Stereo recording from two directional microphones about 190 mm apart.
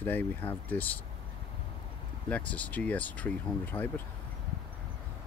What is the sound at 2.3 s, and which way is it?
Speech, 5° left (ahead or behind).